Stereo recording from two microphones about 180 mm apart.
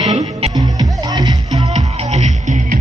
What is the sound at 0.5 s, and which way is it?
Music, 20° right (ahead or behind).